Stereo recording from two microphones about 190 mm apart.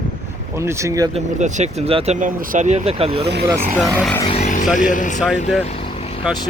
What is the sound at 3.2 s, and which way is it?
Speech, 60° right (ahead or behind).